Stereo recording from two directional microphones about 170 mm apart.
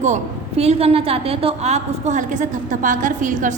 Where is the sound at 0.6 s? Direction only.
35° right (ahead or behind).